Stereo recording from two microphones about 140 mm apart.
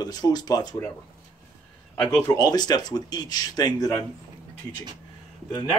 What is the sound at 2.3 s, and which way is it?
Speech, 25° left (ahead or behind).